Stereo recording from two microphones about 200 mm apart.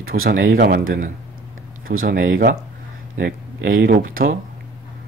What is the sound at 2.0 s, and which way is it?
Speech, 45° right (ahead or behind).